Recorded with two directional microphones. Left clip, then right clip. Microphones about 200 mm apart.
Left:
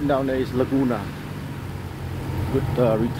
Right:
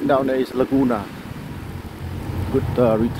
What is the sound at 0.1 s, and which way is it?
Speech, 30° right (ahead or behind).